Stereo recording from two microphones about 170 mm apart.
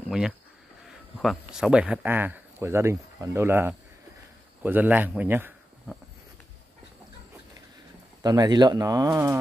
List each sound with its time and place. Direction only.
0.8 s speech: centre (ahead or behind)
8.2 s speech: 25° right (ahead or behind)